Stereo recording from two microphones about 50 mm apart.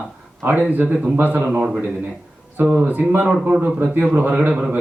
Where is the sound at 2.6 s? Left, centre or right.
Right.